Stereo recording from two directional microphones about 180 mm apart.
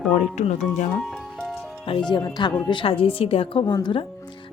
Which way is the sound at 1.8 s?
25° left (ahead or behind).